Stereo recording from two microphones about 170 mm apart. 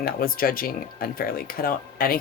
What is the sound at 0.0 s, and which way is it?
Speech, 60° left (ahead or behind).